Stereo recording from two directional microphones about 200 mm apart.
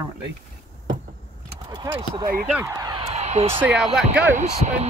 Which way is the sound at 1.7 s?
15° right (ahead or behind).